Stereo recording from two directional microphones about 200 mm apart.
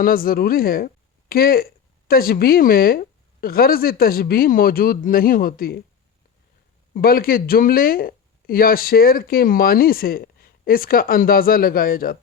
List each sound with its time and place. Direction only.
0.0 s speech: 45° left (ahead or behind)
6.9 s speech: 45° left (ahead or behind)